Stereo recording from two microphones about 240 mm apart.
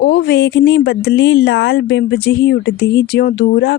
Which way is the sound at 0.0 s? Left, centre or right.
Left.